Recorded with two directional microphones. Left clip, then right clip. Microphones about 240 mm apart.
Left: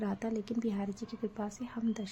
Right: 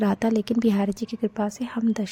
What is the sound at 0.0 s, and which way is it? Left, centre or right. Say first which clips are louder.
Speech: right 13 dB; right.